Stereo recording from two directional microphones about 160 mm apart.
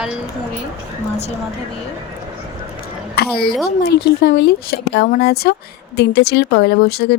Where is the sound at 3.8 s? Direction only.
90° left.